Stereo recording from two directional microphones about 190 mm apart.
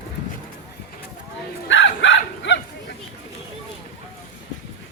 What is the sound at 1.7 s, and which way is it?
Bow-wow, 80° left.